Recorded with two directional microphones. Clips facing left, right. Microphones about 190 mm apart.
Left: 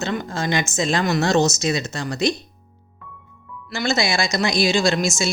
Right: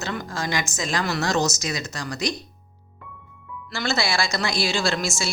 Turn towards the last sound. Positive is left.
turn(degrees=20)  # may be behind; listen again after turning